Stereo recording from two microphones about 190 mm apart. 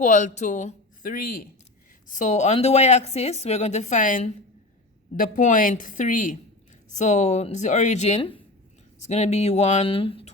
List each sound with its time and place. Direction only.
0.0 s a woman's voice: 40° left (ahead or behind)